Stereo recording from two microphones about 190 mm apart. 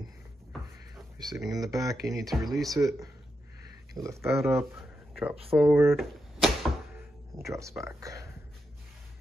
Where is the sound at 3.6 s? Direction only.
15° right (ahead or behind).